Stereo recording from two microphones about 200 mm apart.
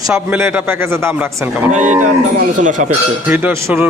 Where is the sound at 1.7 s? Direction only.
35° right (ahead or behind).